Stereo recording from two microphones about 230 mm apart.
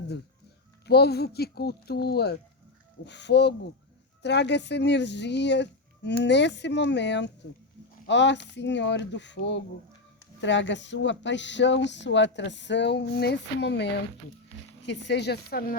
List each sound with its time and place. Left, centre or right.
0.9 s speech: left